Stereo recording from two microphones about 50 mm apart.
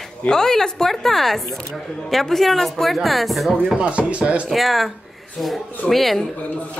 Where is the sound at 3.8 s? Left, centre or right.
Right.